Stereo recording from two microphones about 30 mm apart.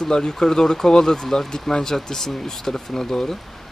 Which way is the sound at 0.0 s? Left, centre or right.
Centre.